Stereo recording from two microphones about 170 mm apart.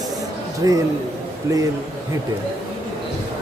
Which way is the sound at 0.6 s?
20° right (ahead or behind).